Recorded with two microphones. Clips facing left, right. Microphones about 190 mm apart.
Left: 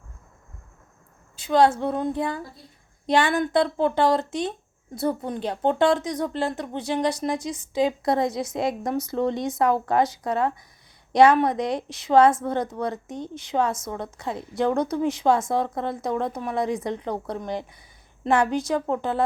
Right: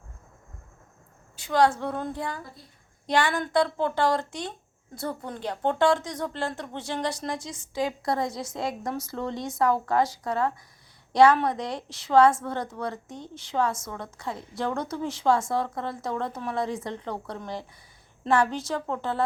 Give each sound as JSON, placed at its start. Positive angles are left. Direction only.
{"t": 1.4, "sound": "a woman's voice", "side_deg": 20}